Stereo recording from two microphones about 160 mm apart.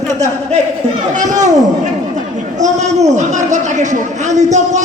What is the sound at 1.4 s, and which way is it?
A man's voice, 50° right (ahead or behind).